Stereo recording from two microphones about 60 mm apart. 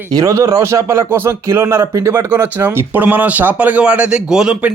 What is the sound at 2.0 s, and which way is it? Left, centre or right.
Speech, right.